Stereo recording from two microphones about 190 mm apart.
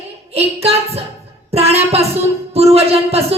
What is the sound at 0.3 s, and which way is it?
A woman's voice, 35° right (ahead or behind).